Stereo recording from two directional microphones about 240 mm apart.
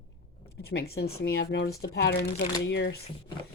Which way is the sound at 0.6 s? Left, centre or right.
Left.